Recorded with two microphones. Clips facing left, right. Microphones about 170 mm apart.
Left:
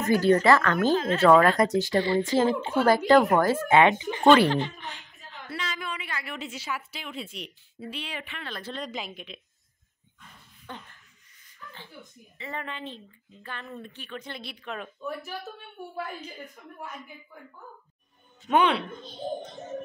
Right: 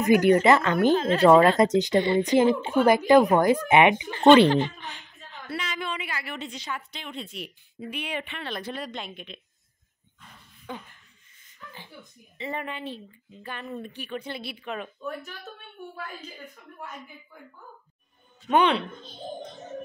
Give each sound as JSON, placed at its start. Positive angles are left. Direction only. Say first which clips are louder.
{"t": 0.0, "sound": "a woman's voice", "louder": "right 2 dB", "side_deg": -15}
{"t": 0.9, "sound": "a woman's voice", "louder": "right 2 dB", "side_deg": -30}
{"t": 5.6, "sound": "a sound", "louder": "right 2 dB", "side_deg": -25}
{"t": 6.0, "sound": "a woman's voice", "louder": "right 1 dB", "side_deg": -5}
{"t": 7.8, "sound": "a woman's voice", "louder": "right 4 dB", "side_deg": -15}
{"t": 8.7, "sound": "a woman's voice", "louder": "even", "side_deg": 0}
{"t": 10.7, "sound": "a woman's voice", "louder": "right 4 dB", "side_deg": -10}
{"t": 12.4, "sound": "a woman's voice", "louder": "right 3 dB", "side_deg": -20}
{"t": 18.5, "sound": "a woman's voice", "louder": "right 1 dB", "side_deg": 5}